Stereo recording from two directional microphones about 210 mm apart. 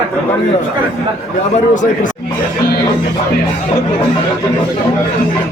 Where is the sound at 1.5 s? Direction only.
35° left (ahead or behind).